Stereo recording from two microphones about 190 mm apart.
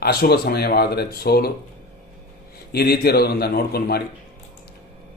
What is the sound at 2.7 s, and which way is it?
A man's voice, 55° left (ahead or behind).